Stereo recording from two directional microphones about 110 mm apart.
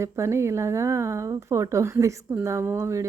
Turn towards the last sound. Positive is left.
turn(degrees=-25)  # may be behind; listen again after turning